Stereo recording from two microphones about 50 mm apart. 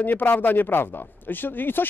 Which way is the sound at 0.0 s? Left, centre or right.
Left.